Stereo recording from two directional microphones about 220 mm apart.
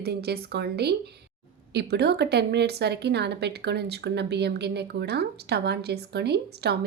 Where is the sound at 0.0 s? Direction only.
45° right (ahead or behind).